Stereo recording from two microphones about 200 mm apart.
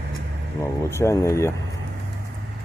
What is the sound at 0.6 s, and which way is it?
Speech, 15° left (ahead or behind).